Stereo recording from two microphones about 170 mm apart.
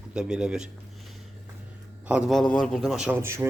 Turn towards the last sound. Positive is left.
turn(degrees=-15)  # may be behind; listen again after turning